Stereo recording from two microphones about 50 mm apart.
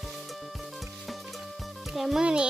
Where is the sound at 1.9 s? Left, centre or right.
Centre.